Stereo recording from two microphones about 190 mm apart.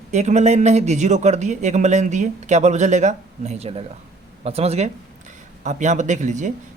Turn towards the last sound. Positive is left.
turn(degrees=-40)  # may be behind; listen again after turning